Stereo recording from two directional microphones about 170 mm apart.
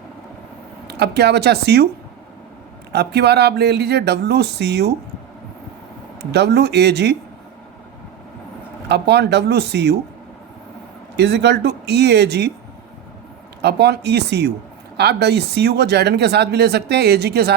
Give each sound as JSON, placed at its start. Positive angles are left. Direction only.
{"t": 0.9, "sound": "speech", "side_deg": -75}
{"t": 2.9, "sound": "speech", "side_deg": -75}
{"t": 6.3, "sound": "speech", "side_deg": -75}
{"t": 8.9, "sound": "speech", "side_deg": -80}
{"t": 11.2, "sound": "speech", "side_deg": -80}
{"t": 13.6, "sound": "speech", "side_deg": -80}